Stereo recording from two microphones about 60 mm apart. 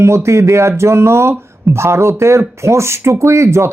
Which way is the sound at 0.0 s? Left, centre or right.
Right.